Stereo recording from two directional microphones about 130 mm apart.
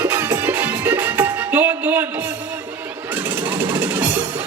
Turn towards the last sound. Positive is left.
turn(degrees=-15)  # may be behind; listen again after turning